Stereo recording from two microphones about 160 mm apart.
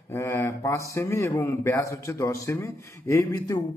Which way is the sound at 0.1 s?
20° left (ahead or behind).